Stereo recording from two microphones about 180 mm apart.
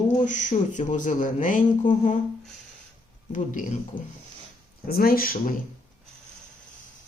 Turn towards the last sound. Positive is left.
turn(degrees=50)  # may be behind; listen again after turning